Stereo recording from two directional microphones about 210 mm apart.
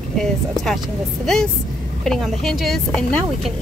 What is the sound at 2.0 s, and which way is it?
Speech, centre (ahead or behind).